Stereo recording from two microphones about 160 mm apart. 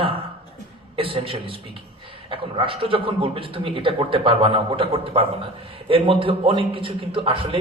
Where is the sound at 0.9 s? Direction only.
35° right (ahead or behind).